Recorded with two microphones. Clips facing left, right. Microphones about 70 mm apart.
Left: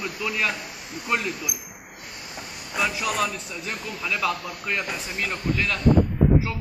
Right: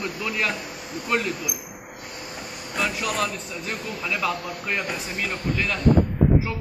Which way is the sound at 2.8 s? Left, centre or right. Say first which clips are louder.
Left 1 dB; centre.